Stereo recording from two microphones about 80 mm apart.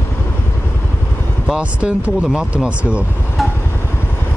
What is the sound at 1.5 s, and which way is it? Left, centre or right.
Speech, centre.